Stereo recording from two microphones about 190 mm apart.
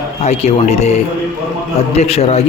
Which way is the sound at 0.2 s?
35° left (ahead or behind).